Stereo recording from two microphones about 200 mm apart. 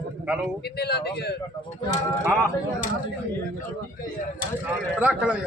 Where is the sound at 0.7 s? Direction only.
55° left (ahead or behind).